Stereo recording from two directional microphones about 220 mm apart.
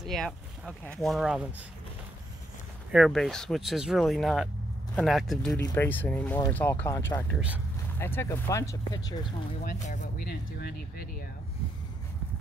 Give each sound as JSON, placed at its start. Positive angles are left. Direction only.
{"t": 0.0, "sound": "speech", "side_deg": 0}
{"t": 2.9, "sound": "speech", "side_deg": 0}
{"t": 7.3, "sound": "speech", "side_deg": -5}
{"t": 8.0, "sound": "speech", "side_deg": 10}
{"t": 9.6, "sound": "speech", "side_deg": 35}